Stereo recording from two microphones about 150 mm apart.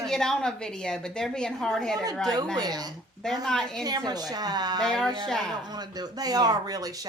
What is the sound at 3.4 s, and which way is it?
Speech, 5° left (ahead or behind).